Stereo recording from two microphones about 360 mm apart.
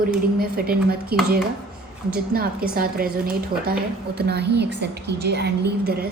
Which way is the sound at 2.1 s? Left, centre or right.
Right.